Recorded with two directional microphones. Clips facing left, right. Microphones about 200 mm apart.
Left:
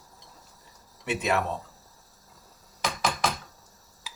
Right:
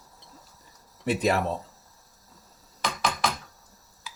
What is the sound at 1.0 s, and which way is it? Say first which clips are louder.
Speech: right 3 dB; 35° right (ahead or behind).